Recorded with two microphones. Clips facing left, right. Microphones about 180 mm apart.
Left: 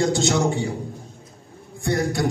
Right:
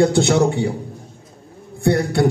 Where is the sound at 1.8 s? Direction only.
60° right (ahead or behind).